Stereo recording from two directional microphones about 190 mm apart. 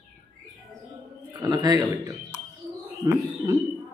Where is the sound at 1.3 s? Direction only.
20° right (ahead or behind).